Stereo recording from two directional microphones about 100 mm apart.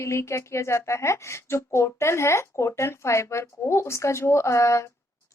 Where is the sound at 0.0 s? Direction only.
30° left (ahead or behind).